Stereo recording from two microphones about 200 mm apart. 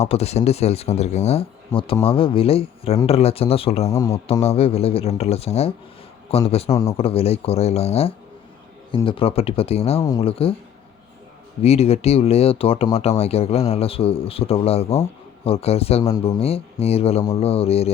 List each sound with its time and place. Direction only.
0.0 s speech: 30° left (ahead or behind)
11.6 s speech: 30° left (ahead or behind)